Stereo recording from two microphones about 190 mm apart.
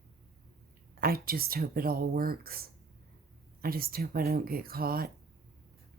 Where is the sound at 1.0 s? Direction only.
50° right (ahead or behind).